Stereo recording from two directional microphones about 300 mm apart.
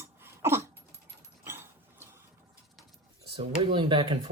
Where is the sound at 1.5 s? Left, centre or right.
Centre.